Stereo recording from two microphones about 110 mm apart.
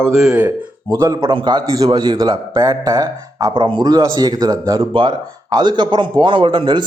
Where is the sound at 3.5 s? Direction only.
50° right (ahead or behind).